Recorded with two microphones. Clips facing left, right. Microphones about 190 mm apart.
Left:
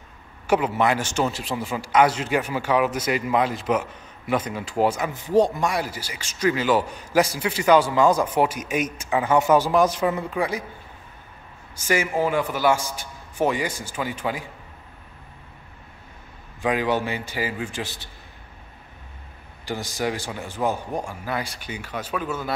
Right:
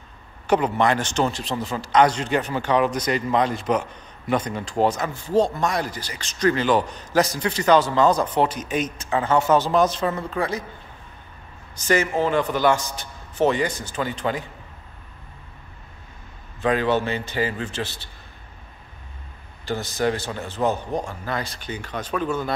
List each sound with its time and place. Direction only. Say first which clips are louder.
0.5 s a man's voice: right 1 dB; 5° left (ahead or behind)
11.7 s a man's voice: right 2 dB; 10° left (ahead or behind)
16.6 s a man's voice: right 2 dB; 10° left (ahead or behind)
19.6 s a man's voice: right 3 dB; 10° left (ahead or behind)